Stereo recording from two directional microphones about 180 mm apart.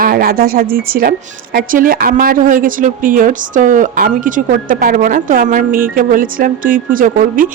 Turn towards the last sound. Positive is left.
turn(degrees=-50)  # may be behind; listen again after turning